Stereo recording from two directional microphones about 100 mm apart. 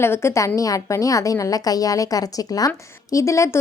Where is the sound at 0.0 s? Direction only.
25° left (ahead or behind).